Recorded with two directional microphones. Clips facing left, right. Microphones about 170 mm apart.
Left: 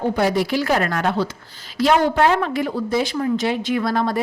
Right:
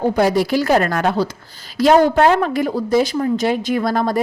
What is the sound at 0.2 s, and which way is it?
A woman's voice, 40° right (ahead or behind).